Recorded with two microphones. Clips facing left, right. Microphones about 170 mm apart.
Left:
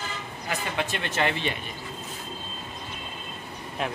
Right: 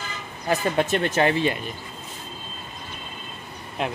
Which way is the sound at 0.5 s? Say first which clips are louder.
Right 8 dB; 40° right (ahead or behind).